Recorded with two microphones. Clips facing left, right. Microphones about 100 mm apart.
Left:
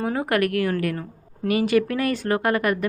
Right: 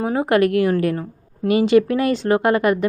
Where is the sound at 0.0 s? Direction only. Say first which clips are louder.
Right 5 dB; 20° right (ahead or behind).